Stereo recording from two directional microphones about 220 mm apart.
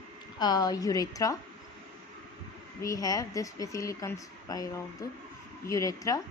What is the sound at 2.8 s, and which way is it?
A woman's voice, 15° left (ahead or behind).